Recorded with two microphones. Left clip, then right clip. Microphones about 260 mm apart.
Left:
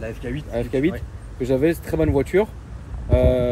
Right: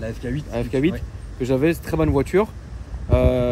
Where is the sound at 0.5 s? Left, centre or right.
Right.